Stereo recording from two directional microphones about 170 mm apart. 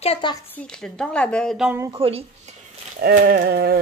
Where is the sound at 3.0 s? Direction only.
65° right (ahead or behind).